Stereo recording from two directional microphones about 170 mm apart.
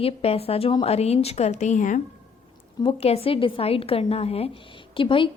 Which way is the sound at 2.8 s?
35° left (ahead or behind).